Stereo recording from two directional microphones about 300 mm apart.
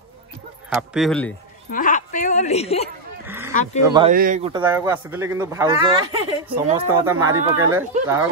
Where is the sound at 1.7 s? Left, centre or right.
Left.